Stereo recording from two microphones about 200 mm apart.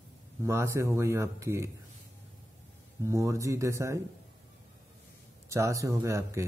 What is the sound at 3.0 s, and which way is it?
Speech, 15° right (ahead or behind).